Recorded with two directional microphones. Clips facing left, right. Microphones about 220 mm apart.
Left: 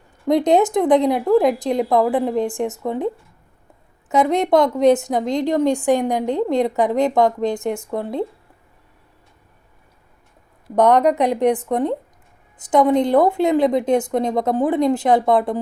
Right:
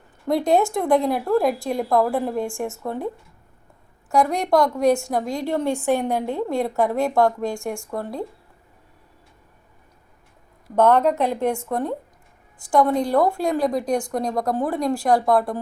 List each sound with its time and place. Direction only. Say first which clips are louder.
0.3 s speech: left 4 dB; 20° left (ahead or behind)
4.1 s a woman's voice: left 3 dB; 20° left (ahead or behind)
10.8 s a woman's voice: left 2 dB; 15° left (ahead or behind)